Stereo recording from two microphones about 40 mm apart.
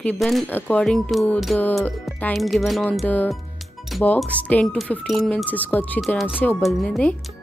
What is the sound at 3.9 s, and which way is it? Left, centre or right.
Music, centre.